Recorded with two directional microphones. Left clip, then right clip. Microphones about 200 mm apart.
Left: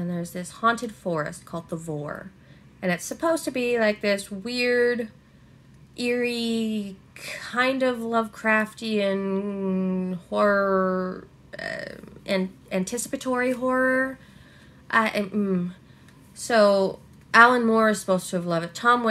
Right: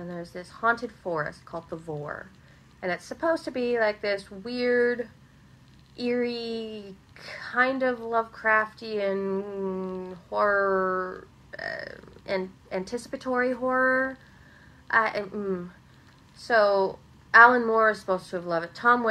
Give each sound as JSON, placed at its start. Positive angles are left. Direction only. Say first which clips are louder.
{"t": 0.0, "sound": "a woman's voice", "louder": "left 4 dB", "side_deg": 20}